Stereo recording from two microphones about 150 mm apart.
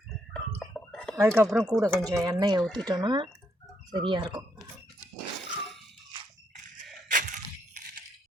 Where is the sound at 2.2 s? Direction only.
25° right (ahead or behind).